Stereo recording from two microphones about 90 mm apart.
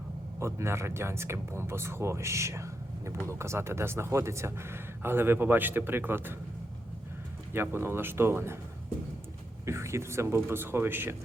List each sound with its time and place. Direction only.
0.3 s speech: 30° right (ahead or behind)
7.5 s speech: 25° right (ahead or behind)
9.6 s speech: 30° right (ahead or behind)